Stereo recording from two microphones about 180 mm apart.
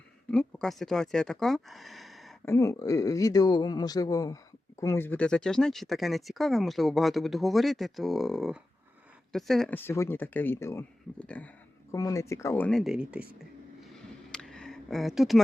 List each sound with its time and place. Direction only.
0.3 s speech: 5° left (ahead or behind)
2.4 s speech: 15° left (ahead or behind)
11.9 s speech: 20° left (ahead or behind); by 13.5 s 5° right (ahead or behind)
13.9 s a sound: 5° left (ahead or behind)